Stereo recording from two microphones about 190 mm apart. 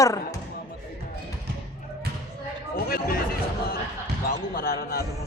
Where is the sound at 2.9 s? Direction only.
50° left (ahead or behind).